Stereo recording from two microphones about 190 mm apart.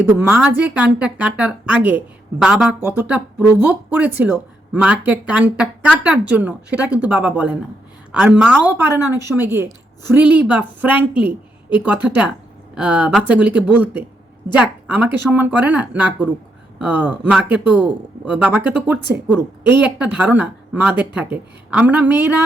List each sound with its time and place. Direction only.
0.0 s speech: 10° right (ahead or behind)
9.0 s a woman's voice: 20° left (ahead or behind)
9.3 s speech: 10° right (ahead or behind)